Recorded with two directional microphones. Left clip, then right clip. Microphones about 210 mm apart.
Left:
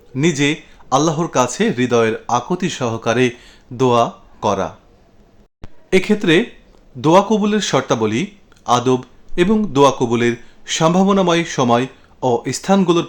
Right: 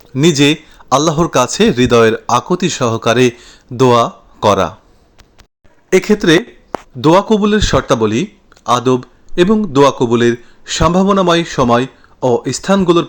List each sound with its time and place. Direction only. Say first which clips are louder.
0.1 s a man's voice: right 6 dB; 25° right (ahead or behind)
5.9 s speech: right 4 dB; 15° right (ahead or behind)